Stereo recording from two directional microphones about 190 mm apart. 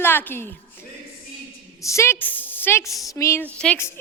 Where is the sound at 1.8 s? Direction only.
15° left (ahead or behind).